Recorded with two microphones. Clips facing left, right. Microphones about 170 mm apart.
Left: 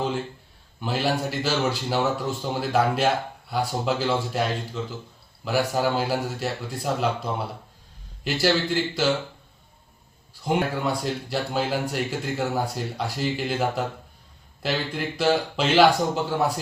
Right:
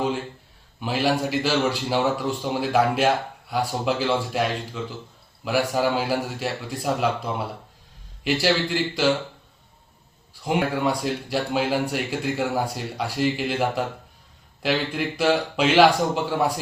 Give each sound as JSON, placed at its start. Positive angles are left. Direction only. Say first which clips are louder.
{"t": 0.8, "sound": "a man's voice", "louder": "right 2 dB", "side_deg": -10}
{"t": 5.5, "sound": "a man's voice", "louder": "right 1 dB", "side_deg": -10}
{"t": 10.4, "sound": "a man's voice", "louder": "right 2 dB", "side_deg": -10}